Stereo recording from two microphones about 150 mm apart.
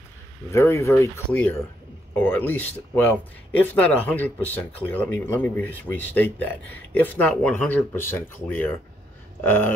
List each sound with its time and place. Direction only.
0.5 s speech: 20° left (ahead or behind)